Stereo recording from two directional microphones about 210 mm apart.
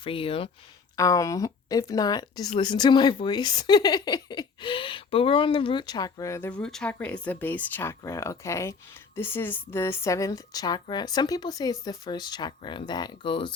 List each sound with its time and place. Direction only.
0.0 s speech: 25° left (ahead or behind)
0.9 s speech: 15° left (ahead or behind)